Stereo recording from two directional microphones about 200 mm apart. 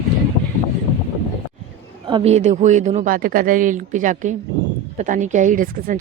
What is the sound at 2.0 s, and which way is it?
A woman's voice, 25° right (ahead or behind).